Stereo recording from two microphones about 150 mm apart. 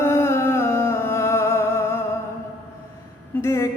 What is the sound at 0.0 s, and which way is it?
Music, 15° left (ahead or behind).